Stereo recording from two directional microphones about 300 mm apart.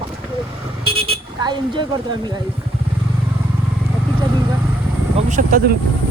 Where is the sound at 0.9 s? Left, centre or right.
Centre.